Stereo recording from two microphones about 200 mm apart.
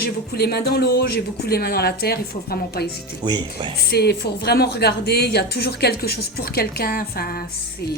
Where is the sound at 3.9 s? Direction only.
55° left (ahead or behind).